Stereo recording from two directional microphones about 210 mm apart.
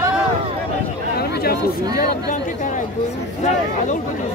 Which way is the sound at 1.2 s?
50° left (ahead or behind).